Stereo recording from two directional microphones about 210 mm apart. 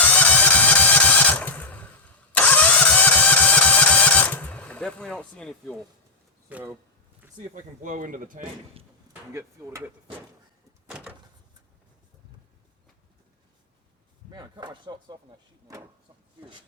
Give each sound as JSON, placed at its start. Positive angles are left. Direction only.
{"t": 0.0, "sound": "a sound", "side_deg": 5}
{"t": 2.3, "sound": "engine starting", "side_deg": 10}
{"t": 6.5, "sound": "speech", "side_deg": -5}
{"t": 7.5, "sound": "speech", "side_deg": -35}
{"t": 9.3, "sound": "speech", "side_deg": -15}
{"t": 10.8, "sound": "door", "side_deg": -5}
{"t": 14.3, "sound": "speech", "side_deg": -20}